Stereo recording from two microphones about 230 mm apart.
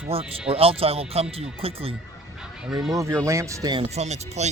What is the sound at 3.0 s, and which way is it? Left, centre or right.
Speech, centre.